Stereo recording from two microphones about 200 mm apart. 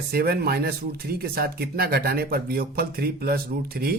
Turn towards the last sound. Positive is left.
turn(degrees=-50)  # may be behind; listen again after turning